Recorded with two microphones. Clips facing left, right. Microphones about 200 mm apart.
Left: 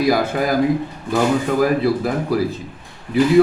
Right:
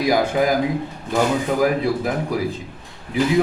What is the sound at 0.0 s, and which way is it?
Speech, 15° right (ahead or behind).